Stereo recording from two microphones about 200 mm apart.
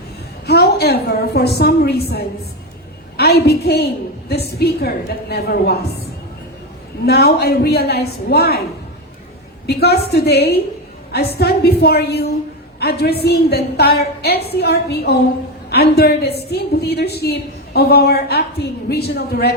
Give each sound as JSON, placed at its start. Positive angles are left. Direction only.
{"t": 0.4, "sound": "a woman's voice", "side_deg": 50}
{"t": 7.0, "sound": "a woman's voice", "side_deg": 50}
{"t": 9.6, "sound": "a woman's voice", "side_deg": 50}